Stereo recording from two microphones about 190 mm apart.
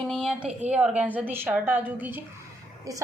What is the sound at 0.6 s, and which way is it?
A woman's voice, 5° right (ahead or behind).